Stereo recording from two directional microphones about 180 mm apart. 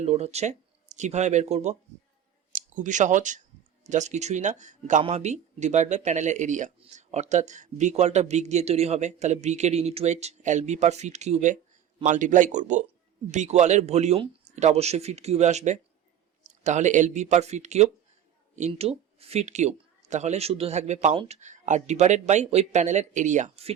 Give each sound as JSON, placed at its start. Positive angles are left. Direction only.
{"t": 0.0, "sound": "a man's voice", "side_deg": -35}